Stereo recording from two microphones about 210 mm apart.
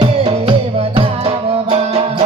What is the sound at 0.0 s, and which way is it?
Music, 25° right (ahead or behind).